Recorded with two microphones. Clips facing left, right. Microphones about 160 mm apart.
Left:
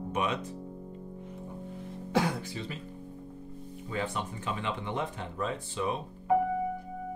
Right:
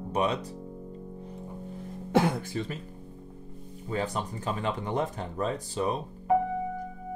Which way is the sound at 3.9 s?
40° right (ahead or behind).